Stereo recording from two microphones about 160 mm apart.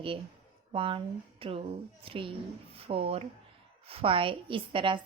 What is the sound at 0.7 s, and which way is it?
A woman's voice, 35° right (ahead or behind).